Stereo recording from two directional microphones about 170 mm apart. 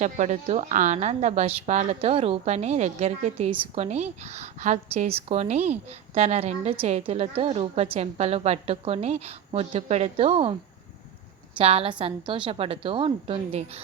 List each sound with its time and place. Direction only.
0.0 s a woman's voice: 45° right (ahead or behind)
11.5 s a woman's voice: 35° right (ahead or behind)